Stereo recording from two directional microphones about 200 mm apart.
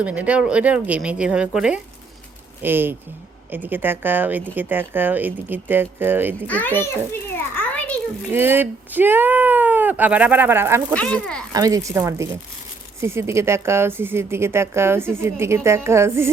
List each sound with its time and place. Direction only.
0.0 s a woman's voice: 5° right (ahead or behind)
6.5 s a child's voice: 10° left (ahead or behind)
6.8 s a sound: 10° left (ahead or behind)
8.3 s a woman's voice: 10° right (ahead or behind)
10.9 s speech: 5° left (ahead or behind)
11.5 s a woman's voice: 15° right (ahead or behind)